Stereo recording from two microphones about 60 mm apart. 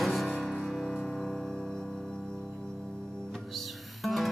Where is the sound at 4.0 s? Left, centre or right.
Centre.